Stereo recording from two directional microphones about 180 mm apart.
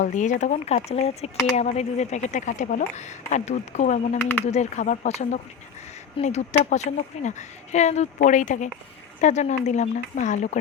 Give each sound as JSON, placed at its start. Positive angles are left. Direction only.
{"t": 0.0, "sound": "speech", "side_deg": 45}